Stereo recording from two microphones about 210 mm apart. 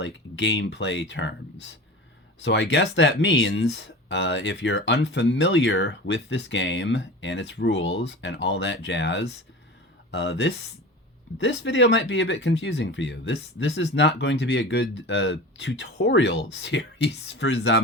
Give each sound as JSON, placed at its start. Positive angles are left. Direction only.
{"t": 0.0, "sound": "speech", "side_deg": 55}